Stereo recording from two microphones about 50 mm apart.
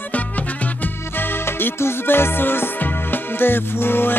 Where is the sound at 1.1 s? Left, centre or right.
Left.